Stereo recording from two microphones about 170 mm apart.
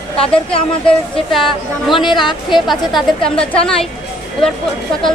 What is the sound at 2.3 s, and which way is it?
Speech, 25° left (ahead or behind).